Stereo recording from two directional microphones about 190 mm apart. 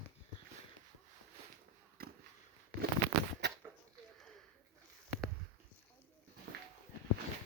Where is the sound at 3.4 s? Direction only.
60° right (ahead or behind).